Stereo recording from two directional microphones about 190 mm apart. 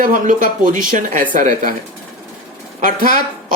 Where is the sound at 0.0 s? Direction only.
45° right (ahead or behind).